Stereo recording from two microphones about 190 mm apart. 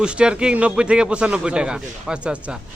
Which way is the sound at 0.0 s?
5° right (ahead or behind).